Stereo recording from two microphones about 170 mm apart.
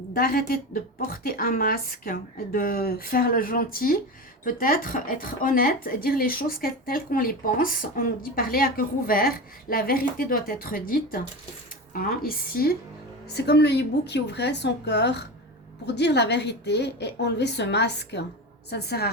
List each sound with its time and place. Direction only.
0.1 s speech: 60° left (ahead or behind)
13.2 s a woman's voice: 75° left (ahead or behind)
18.7 s a woman's voice: 75° left (ahead or behind)